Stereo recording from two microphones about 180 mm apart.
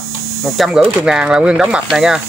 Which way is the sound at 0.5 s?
Centre (ahead or behind).